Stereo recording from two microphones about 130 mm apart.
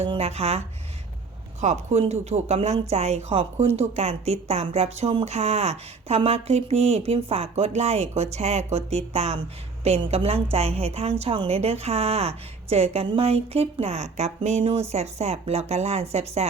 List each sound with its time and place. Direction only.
0.1 s a woman's voice: 50° right (ahead or behind)
1.6 s a woman's voice: 60° right (ahead or behind)